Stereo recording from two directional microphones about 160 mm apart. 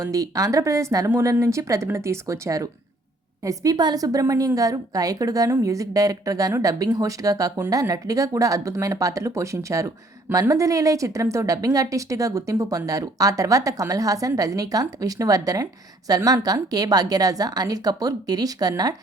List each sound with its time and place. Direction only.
0.0 s a woman's voice: 20° right (ahead or behind)